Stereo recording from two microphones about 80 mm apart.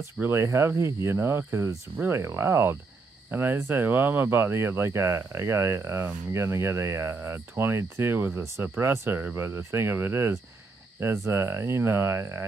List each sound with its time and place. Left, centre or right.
0.2 s speech: right